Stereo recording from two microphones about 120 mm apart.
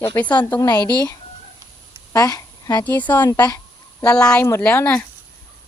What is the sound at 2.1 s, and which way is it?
Speech, 30° left (ahead or behind).